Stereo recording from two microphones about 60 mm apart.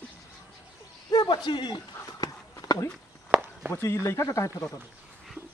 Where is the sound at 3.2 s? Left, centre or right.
Right.